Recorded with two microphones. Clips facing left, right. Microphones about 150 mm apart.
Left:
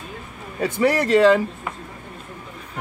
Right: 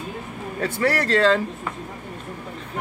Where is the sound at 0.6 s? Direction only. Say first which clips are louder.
Left 3 dB; 15° left (ahead or behind).